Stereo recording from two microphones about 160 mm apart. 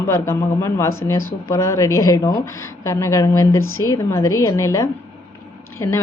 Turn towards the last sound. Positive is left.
turn(degrees=20)  # may be behind; listen again after turning